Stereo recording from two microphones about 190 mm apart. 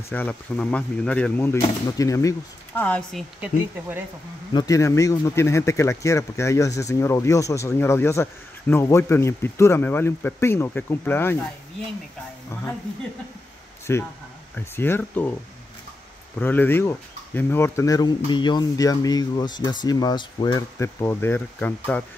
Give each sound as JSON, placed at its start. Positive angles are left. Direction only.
{"t": 0.1, "sound": "speech", "side_deg": 10}
{"t": 4.6, "sound": "speech", "side_deg": 15}
{"t": 13.9, "sound": "speech", "side_deg": 15}
{"t": 16.3, "sound": "speech", "side_deg": 10}